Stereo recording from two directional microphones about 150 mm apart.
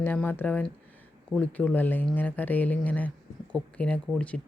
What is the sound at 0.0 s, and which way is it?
Speech, 15° left (ahead or behind).